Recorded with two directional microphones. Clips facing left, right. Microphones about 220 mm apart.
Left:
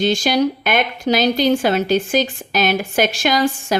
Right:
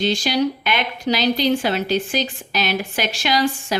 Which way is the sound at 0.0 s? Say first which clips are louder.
Left 3 dB; 50° left (ahead or behind).